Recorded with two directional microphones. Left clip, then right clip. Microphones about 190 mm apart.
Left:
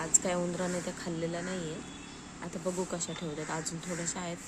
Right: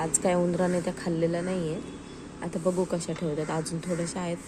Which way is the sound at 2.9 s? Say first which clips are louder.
Right 7 dB; 20° right (ahead or behind).